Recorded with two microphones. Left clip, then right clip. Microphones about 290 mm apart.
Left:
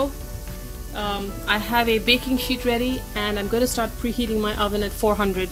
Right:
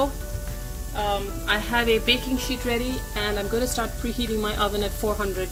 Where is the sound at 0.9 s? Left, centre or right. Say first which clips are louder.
Right 1 dB; left.